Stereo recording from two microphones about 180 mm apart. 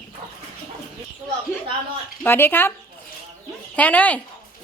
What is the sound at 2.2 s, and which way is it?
Speech, 10° left (ahead or behind).